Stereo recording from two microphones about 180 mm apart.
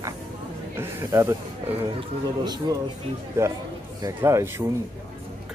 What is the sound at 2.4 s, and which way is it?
Speech, 20° right (ahead or behind).